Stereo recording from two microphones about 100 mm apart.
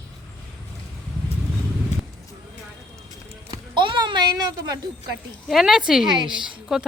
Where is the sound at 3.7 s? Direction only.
50° right (ahead or behind).